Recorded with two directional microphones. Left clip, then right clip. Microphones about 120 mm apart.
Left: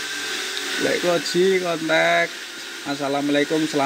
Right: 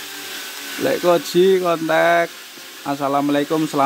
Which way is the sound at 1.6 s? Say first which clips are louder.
Right 3 dB; 45° right (ahead or behind).